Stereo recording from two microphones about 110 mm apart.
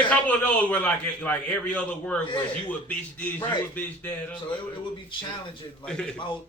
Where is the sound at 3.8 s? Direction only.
15° left (ahead or behind).